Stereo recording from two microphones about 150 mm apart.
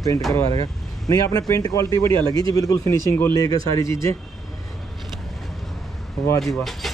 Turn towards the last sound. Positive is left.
turn(degrees=0)  # may be behind; listen again after turning